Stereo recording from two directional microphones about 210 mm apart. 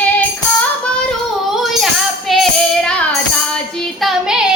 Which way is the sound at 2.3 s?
5° left (ahead or behind).